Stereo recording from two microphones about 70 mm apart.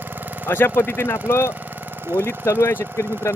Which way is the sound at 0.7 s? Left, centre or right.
Left.